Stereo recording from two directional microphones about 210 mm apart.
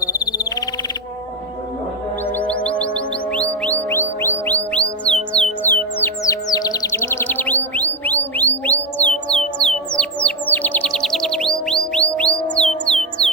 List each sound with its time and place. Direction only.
0.0 s frog: 15° left (ahead or behind)
2.2 s music: 10° left (ahead or behind)
4.8 s music: 30° left (ahead or behind)
5.3 s music: 5° left (ahead or behind)